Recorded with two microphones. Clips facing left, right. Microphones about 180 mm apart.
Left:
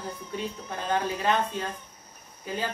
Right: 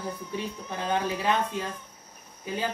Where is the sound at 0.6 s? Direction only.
15° right (ahead or behind).